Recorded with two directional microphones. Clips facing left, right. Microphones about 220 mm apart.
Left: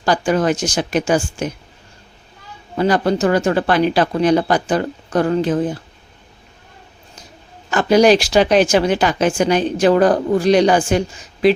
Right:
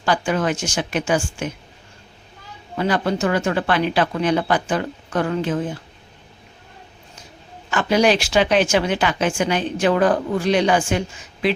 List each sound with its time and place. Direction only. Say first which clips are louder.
0.0 s speech: left 4 dB; 40° left (ahead or behind)
2.7 s speech: left 5 dB; 40° left (ahead or behind)
7.7 s speech: left 5 dB; 40° left (ahead or behind)